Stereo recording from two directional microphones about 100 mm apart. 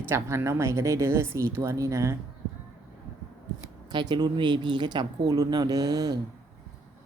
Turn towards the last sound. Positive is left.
turn(degrees=-40)  # may be behind; listen again after turning